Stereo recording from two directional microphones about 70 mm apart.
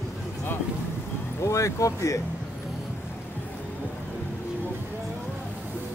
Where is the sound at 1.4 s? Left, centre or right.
Left.